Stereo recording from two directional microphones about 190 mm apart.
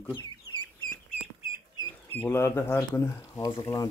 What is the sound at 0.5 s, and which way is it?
Bird, 20° left (ahead or behind).